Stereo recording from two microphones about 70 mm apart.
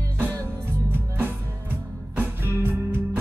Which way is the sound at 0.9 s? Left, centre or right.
Right.